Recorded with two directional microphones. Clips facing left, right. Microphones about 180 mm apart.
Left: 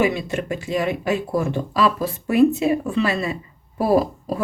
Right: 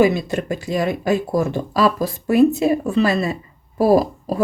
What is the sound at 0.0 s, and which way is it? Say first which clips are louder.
Speech: right 4 dB; 40° right (ahead or behind).